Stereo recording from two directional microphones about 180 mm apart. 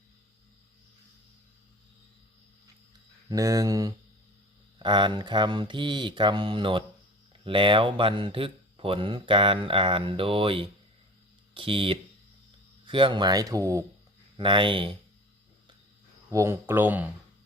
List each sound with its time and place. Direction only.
3.2 s speech: 20° right (ahead or behind)
14.3 s speech: 30° right (ahead or behind)
16.3 s speech: 15° right (ahead or behind)